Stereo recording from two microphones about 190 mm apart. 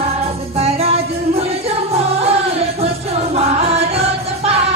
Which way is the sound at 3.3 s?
30° right (ahead or behind).